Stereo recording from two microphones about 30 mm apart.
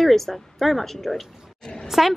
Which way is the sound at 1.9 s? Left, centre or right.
Centre.